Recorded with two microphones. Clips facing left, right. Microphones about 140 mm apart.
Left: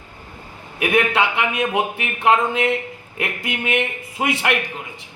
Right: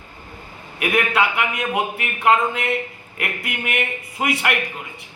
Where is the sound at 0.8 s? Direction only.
25° left (ahead or behind).